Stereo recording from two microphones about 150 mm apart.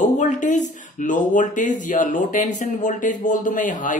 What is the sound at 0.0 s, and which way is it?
Speech, 55° left (ahead or behind).